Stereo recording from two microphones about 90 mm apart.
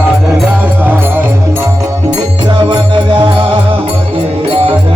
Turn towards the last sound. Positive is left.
turn(degrees=-65)  # may be behind; listen again after turning